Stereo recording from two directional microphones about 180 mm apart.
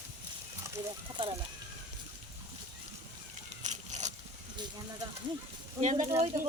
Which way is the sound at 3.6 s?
40° right (ahead or behind).